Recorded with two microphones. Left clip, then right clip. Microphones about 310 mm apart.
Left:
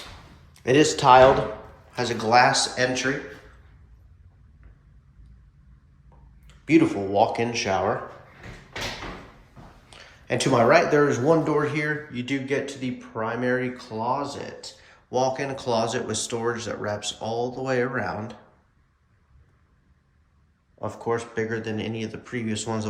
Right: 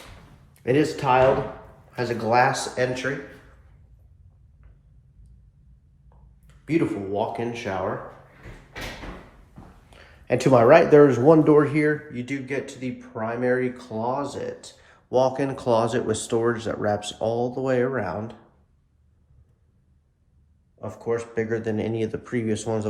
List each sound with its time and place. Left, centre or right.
0.8 s speech: centre
6.7 s speech: centre
9.9 s a sound: centre
10.8 s speech: centre
20.8 s speech: centre